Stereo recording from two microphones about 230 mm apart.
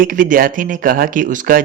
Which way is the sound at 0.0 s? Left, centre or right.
Right.